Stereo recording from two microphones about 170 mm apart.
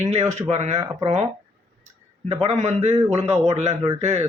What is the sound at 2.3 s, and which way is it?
Speech, 40° right (ahead or behind).